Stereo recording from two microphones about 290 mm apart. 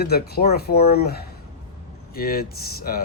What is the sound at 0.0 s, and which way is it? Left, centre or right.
Speech, left.